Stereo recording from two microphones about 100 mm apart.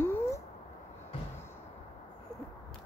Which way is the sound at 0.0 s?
25° left (ahead or behind).